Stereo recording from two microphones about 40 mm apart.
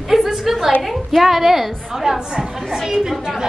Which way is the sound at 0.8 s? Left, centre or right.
Centre.